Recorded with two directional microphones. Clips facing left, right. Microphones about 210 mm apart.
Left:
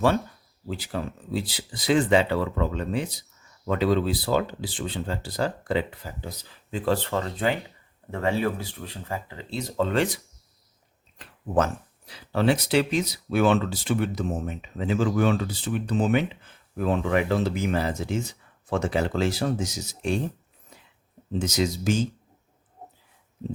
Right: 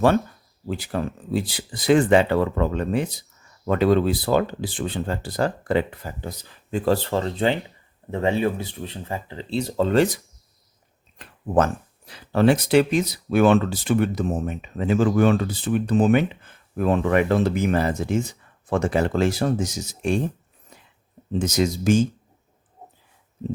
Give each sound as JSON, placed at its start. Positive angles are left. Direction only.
{"t": 0.7, "sound": "speech", "side_deg": -55}
{"t": 11.2, "sound": "speech", "side_deg": -50}
{"t": 21.3, "sound": "speech", "side_deg": -50}